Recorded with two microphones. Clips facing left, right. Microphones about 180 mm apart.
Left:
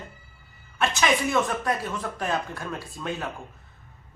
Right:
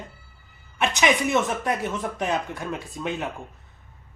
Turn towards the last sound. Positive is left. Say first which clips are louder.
# right 3 dB
turn(degrees=-20)  # may be behind; listen again after turning